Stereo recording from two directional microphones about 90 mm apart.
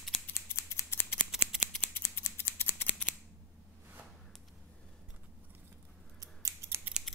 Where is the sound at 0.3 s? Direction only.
30° left (ahead or behind).